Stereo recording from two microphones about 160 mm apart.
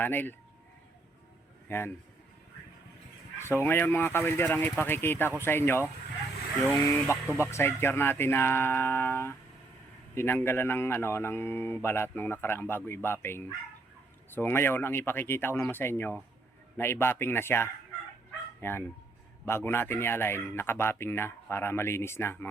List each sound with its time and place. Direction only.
0.0 s speech: 10° left (ahead or behind)
1.7 s speech: 15° left (ahead or behind)
3.4 s speech: 15° left (ahead or behind)